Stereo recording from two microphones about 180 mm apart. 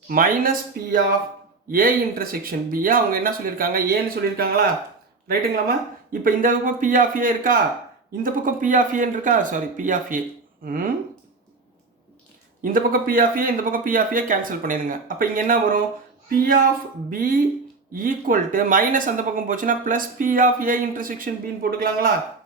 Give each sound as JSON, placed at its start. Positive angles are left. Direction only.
{"t": 0.1, "sound": "speech", "side_deg": -50}
{"t": 12.7, "sound": "speech", "side_deg": -50}
{"t": 17.1, "sound": "speech", "side_deg": -50}